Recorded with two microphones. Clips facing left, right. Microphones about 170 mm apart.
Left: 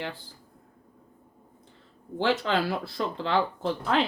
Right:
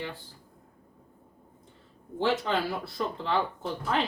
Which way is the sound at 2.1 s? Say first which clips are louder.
Left 2 dB; 80° left.